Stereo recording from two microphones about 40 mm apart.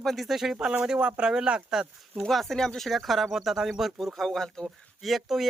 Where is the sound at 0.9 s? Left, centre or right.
Right.